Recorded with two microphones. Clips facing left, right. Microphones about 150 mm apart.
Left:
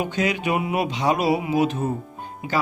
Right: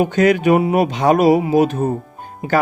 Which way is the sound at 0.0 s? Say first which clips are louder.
Right 10 dB; 50° right (ahead or behind).